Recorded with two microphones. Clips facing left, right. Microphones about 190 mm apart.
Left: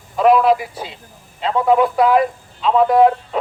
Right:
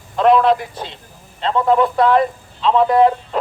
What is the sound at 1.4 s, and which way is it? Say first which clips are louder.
A man's voice: even; 10° left (ahead or behind).